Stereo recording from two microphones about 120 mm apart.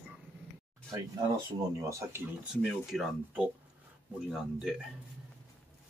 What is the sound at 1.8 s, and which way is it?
Speech, 25° right (ahead or behind).